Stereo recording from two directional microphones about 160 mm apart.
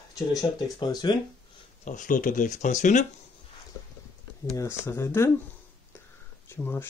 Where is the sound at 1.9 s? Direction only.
55° left (ahead or behind).